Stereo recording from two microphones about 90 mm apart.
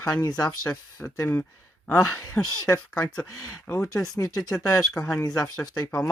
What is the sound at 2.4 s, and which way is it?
Speech, 10° left (ahead or behind).